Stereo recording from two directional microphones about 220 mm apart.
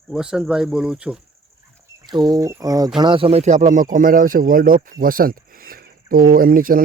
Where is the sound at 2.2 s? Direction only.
15° right (ahead or behind).